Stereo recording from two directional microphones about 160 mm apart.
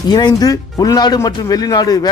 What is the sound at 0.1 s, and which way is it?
Speech, 25° left (ahead or behind).